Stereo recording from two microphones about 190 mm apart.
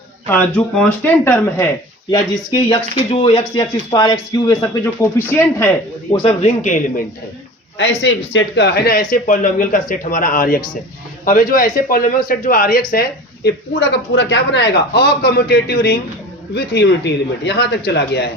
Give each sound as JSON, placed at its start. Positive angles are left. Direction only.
{"t": 0.3, "sound": "speech", "side_deg": 10}
{"t": 2.6, "sound": "speech", "side_deg": 30}
{"t": 6.1, "sound": "speech", "side_deg": 35}
{"t": 7.8, "sound": "speech", "side_deg": 70}